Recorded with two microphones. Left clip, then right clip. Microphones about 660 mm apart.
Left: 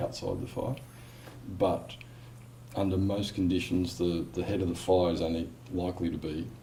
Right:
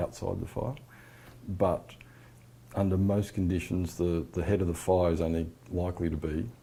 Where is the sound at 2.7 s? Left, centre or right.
Right.